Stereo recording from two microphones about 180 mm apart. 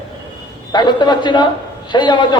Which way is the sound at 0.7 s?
25° left (ahead or behind).